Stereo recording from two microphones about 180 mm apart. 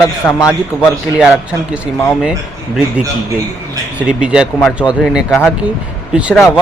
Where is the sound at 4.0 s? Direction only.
5° right (ahead or behind).